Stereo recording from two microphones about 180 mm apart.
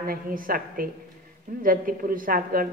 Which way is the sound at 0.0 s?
50° right (ahead or behind).